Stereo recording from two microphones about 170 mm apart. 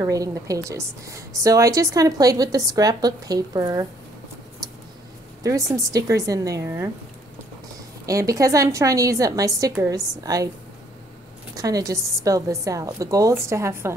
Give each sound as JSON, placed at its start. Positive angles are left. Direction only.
{"t": 0.0, "sound": "a woman's voice", "side_deg": -20}
{"t": 5.4, "sound": "a woman's voice", "side_deg": -20}
{"t": 8.1, "sound": "a woman's voice", "side_deg": -20}
{"t": 11.5, "sound": "a woman's voice", "side_deg": -20}